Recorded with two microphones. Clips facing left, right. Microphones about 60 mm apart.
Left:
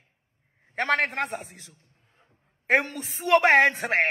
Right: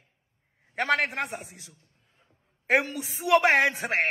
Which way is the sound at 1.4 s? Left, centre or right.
Left.